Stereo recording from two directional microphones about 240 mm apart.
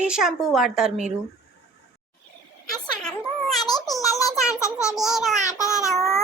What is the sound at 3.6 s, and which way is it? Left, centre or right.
Child singing, centre.